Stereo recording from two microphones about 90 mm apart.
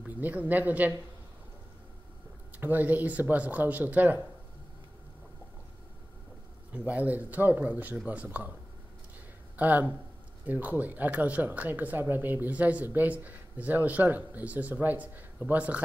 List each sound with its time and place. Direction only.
0.0 s speech: 20° right (ahead or behind)
2.5 s speech: 20° right (ahead or behind)
6.8 s speech: 15° right (ahead or behind)
9.6 s speech: 20° right (ahead or behind)